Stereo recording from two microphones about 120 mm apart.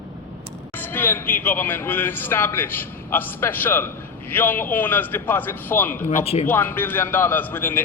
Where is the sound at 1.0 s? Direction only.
15° left (ahead or behind).